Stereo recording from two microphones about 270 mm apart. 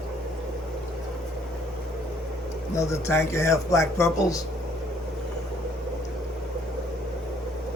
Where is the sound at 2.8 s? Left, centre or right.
Centre.